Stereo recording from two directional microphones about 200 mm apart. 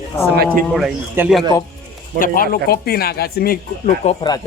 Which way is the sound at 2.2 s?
50° left (ahead or behind).